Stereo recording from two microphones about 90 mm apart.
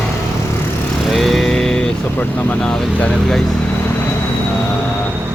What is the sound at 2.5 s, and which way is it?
Speech, 20° left (ahead or behind).